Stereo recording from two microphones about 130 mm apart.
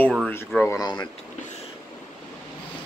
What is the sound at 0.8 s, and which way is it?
Speech, 35° left (ahead or behind).